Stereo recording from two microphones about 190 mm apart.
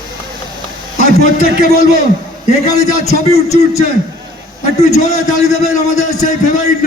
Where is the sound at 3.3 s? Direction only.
15° left (ahead or behind).